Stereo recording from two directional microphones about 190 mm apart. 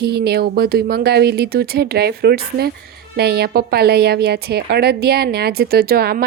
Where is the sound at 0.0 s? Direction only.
60° right (ahead or behind).